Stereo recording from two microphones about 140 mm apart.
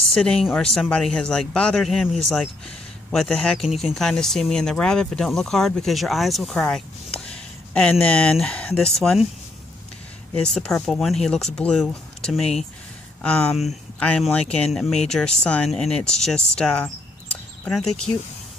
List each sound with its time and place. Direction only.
0.1 s speech: 5° left (ahead or behind)
10.3 s speech: 5° left (ahead or behind)